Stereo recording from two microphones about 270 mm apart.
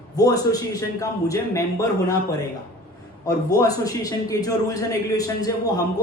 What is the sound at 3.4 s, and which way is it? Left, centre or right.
A man's voice, centre.